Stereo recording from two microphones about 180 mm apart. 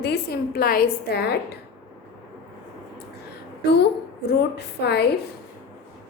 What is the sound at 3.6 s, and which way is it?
A woman's voice, 70° left (ahead or behind).